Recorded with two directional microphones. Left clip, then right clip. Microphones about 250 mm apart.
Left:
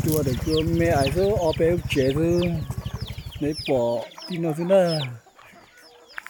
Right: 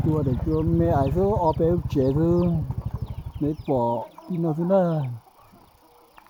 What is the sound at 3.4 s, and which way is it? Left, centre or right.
Speech, centre.